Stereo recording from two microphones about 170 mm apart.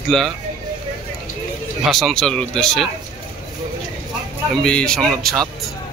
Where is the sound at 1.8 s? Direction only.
Centre (ahead or behind).